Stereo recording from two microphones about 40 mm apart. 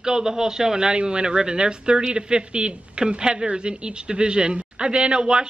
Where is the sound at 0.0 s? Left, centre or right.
Centre.